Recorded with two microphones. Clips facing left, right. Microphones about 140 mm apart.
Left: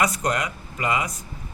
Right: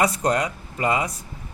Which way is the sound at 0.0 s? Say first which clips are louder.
Right 3 dB; 30° right (ahead or behind).